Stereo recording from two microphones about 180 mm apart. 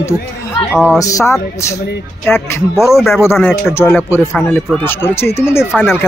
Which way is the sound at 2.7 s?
Centre (ahead or behind).